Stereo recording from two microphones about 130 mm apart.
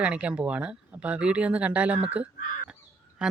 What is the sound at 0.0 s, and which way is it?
Speech, 10° right (ahead or behind).